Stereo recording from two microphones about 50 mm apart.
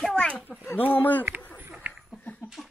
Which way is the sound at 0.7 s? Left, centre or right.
Left.